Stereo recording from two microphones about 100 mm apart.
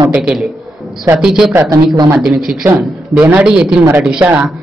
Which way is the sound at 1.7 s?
40° right (ahead or behind).